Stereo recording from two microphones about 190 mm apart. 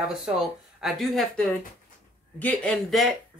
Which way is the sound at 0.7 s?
Centre (ahead or behind).